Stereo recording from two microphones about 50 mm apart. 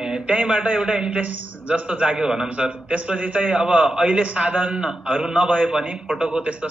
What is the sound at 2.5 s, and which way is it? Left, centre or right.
A man's voice, right.